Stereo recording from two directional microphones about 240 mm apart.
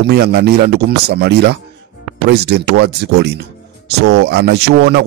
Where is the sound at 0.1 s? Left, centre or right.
Right.